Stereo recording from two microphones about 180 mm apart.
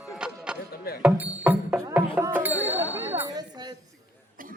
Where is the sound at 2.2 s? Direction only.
10° right (ahead or behind).